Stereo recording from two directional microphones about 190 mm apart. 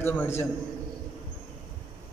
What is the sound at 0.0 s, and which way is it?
Speech, 10° left (ahead or behind).